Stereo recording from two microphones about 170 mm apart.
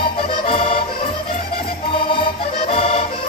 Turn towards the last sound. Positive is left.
turn(degrees=35)  # may be behind; listen again after turning